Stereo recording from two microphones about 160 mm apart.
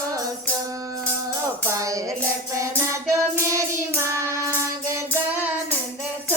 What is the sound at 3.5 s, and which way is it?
Child singing, 20° right (ahead or behind).